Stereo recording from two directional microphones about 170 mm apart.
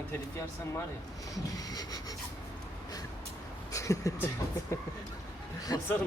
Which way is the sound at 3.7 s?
20° left (ahead or behind).